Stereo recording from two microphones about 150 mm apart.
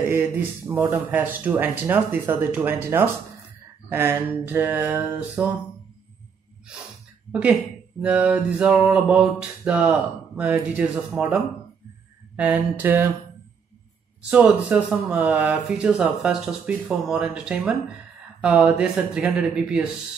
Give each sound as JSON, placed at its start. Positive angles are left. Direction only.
{"t": 0.0, "sound": "speech", "side_deg": -15}
{"t": 6.7, "sound": "speech", "side_deg": -5}
{"t": 8.0, "sound": "speech", "side_deg": -10}
{"t": 14.3, "sound": "speech", "side_deg": -10}